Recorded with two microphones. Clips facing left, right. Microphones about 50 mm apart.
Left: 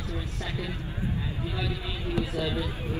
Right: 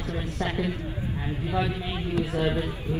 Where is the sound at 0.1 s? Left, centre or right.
Right.